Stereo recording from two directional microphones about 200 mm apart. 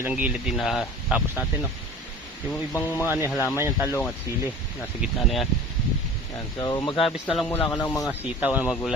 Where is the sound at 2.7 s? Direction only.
10° left (ahead or behind).